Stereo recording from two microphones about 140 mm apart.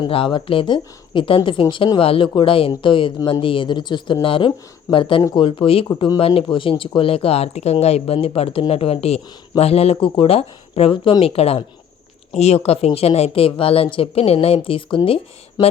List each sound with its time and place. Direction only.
0.0 s speech: 40° left (ahead or behind)